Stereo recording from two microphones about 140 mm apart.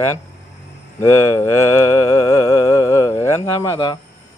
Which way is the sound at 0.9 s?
20° left (ahead or behind).